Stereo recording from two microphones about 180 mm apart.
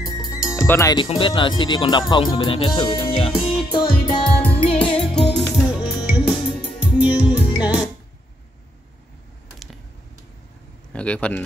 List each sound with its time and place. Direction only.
0.3 s music: 20° left (ahead or behind)
1.1 s speech: 25° left (ahead or behind)
3.3 s music: centre (ahead or behind)
4.0 s music: 25° left (ahead or behind)
4.4 s music: 10° left (ahead or behind)
10.9 s speech: 5° left (ahead or behind)